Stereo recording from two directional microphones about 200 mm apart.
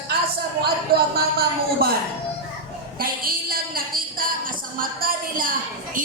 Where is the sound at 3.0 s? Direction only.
45° right (ahead or behind).